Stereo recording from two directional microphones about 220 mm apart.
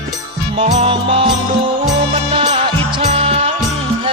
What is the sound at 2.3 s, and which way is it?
Music, 30° right (ahead or behind).